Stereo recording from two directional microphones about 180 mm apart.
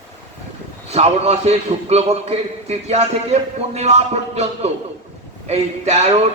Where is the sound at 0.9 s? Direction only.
35° right (ahead or behind).